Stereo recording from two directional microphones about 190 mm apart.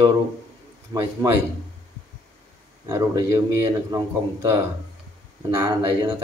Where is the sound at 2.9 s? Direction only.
15° right (ahead or behind).